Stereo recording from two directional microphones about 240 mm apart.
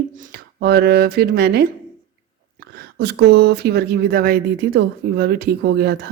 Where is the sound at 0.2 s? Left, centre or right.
Right.